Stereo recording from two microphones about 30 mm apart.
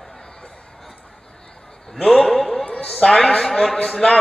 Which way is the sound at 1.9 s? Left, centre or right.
Centre.